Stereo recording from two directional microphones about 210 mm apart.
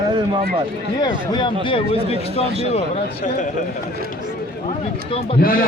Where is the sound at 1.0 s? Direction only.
20° left (ahead or behind).